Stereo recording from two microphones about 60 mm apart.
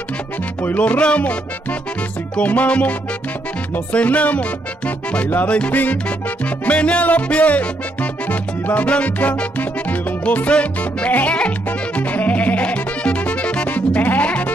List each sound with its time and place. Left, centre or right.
0.6 s music: left